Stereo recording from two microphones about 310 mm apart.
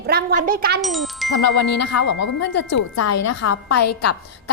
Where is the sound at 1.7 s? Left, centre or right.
Left.